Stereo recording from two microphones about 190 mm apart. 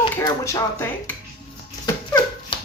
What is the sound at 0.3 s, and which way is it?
Speech, 15° left (ahead or behind).